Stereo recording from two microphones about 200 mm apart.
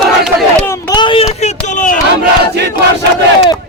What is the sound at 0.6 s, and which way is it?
Speech, 20° left (ahead or behind).